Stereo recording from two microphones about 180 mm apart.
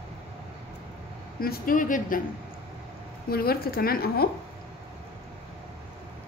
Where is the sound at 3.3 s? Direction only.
55° left (ahead or behind).